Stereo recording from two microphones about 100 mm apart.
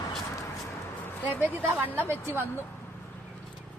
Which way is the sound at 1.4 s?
20° right (ahead or behind).